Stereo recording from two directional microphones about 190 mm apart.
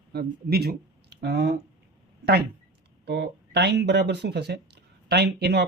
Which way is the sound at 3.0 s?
60° right (ahead or behind).